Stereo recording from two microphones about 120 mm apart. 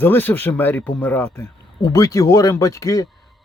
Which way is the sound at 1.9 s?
30° left (ahead or behind).